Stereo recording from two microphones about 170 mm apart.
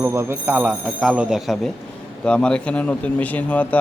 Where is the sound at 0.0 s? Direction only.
15° right (ahead or behind).